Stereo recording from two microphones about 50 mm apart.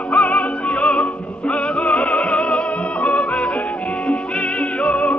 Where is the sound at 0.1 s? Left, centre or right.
Left.